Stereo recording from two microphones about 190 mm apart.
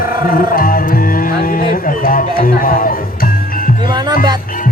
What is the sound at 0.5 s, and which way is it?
Speech, 50° left (ahead or behind).